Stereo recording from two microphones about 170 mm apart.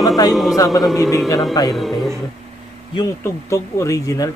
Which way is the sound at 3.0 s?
15° left (ahead or behind).